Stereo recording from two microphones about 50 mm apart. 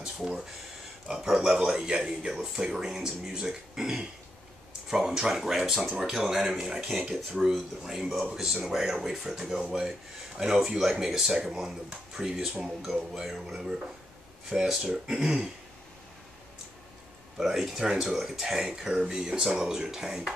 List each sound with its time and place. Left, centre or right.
0.0 s a sound: centre
1.4 s speech: centre
17.4 s speech: centre